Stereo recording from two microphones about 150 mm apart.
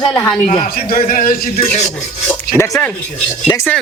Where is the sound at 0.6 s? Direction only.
75° left (ahead or behind).